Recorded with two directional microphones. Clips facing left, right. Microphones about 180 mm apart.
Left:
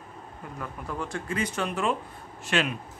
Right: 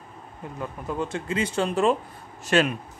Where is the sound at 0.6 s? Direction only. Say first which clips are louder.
Right 5 dB; 20° right (ahead or behind); by 2.7 s 40° right (ahead or behind).